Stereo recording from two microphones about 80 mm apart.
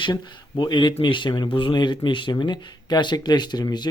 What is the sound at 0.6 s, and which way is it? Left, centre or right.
Speech, left.